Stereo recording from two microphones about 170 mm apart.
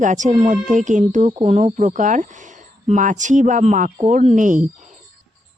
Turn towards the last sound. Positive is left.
turn(degrees=-50)  # may be behind; listen again after turning